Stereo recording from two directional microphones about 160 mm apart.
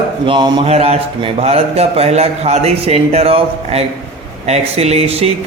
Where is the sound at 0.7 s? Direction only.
40° right (ahead or behind).